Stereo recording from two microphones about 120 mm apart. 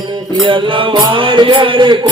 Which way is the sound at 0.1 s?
40° right (ahead or behind).